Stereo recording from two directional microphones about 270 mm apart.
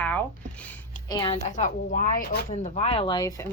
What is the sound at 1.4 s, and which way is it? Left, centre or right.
Speech, left.